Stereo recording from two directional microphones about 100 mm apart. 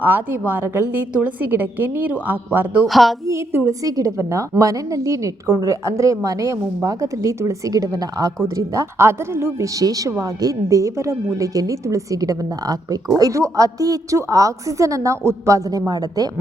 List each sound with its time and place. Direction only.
0.0 s a woman's voice: 20° right (ahead or behind)
2.8 s speech: centre (ahead or behind)
3.2 s a woman's voice: 25° right (ahead or behind)